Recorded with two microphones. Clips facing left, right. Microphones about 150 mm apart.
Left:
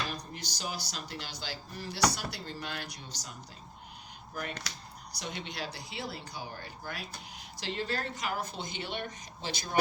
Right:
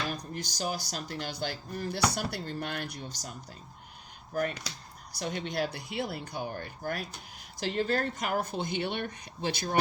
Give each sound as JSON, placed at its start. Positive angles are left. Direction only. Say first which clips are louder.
{"t": 0.3, "sound": "speech", "louder": "right 5 dB", "side_deg": -45}
{"t": 5.1, "sound": "speech", "louder": "right 7 dB", "side_deg": -50}